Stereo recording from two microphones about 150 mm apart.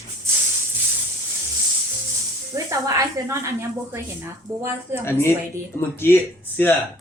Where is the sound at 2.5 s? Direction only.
20° right (ahead or behind).